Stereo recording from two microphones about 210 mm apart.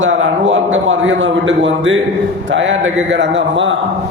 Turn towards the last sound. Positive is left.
turn(degrees=-60)  # may be behind; listen again after turning